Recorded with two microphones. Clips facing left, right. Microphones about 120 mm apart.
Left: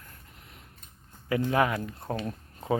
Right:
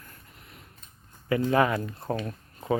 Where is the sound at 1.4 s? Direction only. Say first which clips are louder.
Right 3 dB; 5° left (ahead or behind).